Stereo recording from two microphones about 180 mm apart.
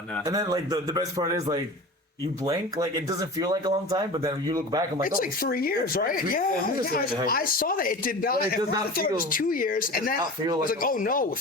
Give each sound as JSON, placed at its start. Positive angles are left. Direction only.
{"t": 0.3, "sound": "speech", "side_deg": -20}
{"t": 5.0, "sound": "speech", "side_deg": 55}